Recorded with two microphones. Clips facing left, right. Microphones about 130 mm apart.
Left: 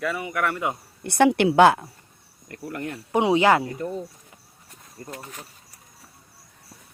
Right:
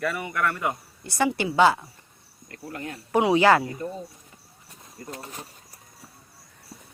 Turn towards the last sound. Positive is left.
turn(degrees=30)  # may be behind; listen again after turning